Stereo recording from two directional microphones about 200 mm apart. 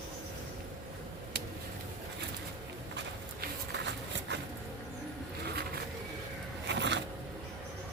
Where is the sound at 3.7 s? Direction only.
60° right (ahead or behind).